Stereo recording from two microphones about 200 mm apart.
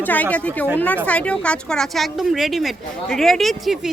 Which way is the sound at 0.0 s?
10° left (ahead or behind).